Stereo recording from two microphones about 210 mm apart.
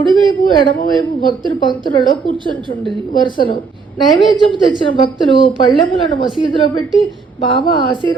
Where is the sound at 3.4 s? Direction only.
25° left (ahead or behind).